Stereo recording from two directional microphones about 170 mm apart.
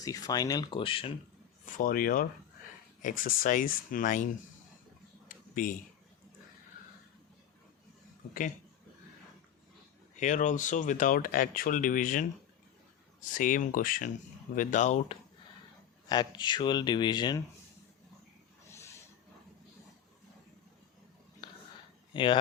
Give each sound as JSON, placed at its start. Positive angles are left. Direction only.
{"t": 0.0, "sound": "speech", "side_deg": 20}
{"t": 1.6, "sound": "speech", "side_deg": 50}
{"t": 5.3, "sound": "a sound", "side_deg": 55}
{"t": 8.3, "sound": "speech", "side_deg": 50}
{"t": 10.2, "sound": "speech", "side_deg": 45}
{"t": 13.3, "sound": "speech", "side_deg": 50}
{"t": 16.0, "sound": "speech", "side_deg": 25}
{"t": 21.4, "sound": "whispering", "side_deg": 25}
{"t": 22.1, "sound": "speech", "side_deg": 30}